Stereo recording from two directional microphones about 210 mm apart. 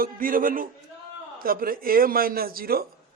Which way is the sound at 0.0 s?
40° right (ahead or behind).